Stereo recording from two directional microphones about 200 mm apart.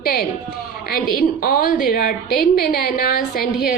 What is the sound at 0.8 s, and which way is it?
A woman's voice, 50° left (ahead or behind).